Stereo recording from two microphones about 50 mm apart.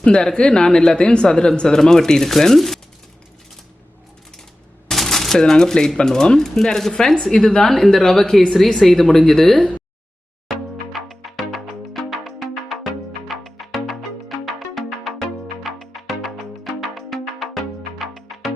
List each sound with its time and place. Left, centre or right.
0.0 s speech: centre
4.9 s speech: centre
9.6 s speech: left
10.9 s music: centre